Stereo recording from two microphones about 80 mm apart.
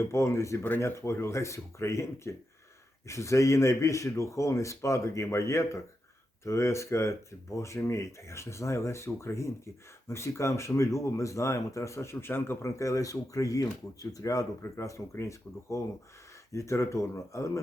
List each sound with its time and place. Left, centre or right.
0.0 s speech: left